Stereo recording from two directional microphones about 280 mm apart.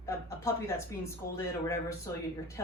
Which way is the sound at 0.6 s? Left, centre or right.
Centre.